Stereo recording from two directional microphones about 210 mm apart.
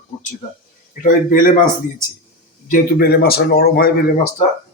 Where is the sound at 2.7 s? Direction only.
45° left (ahead or behind).